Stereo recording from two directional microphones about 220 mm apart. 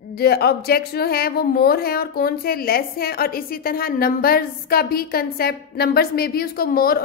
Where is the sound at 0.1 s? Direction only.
45° left (ahead or behind).